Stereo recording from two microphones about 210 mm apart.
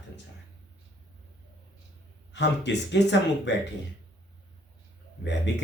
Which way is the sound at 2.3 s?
55° left (ahead or behind).